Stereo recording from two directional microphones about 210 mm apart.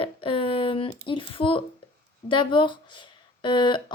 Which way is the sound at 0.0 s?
25° left (ahead or behind).